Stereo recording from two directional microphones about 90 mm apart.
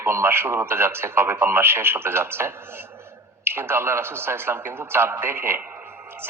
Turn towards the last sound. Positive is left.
turn(degrees=-25)  # may be behind; listen again after turning